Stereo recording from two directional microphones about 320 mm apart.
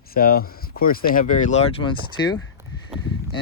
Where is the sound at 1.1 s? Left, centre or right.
Left.